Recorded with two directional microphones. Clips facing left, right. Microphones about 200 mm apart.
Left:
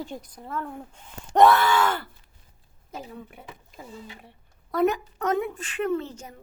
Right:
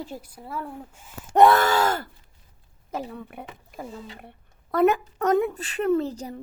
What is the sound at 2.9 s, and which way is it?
A woman's voice, 60° right (ahead or behind).